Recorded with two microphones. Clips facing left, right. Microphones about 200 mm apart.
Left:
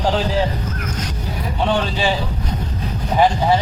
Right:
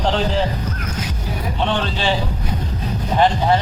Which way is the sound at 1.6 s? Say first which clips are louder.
Left 2 dB; 5° left (ahead or behind).